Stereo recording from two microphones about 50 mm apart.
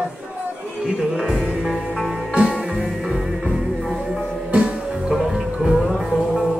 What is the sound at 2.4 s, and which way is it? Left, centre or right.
Music, centre.